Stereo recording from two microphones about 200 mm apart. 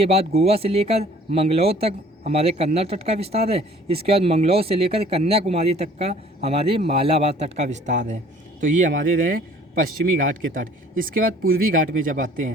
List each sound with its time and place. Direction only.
0.0 s a man's voice: 30° right (ahead or behind)